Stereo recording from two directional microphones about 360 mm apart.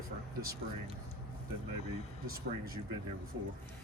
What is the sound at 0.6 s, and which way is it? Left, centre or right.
Speech, right.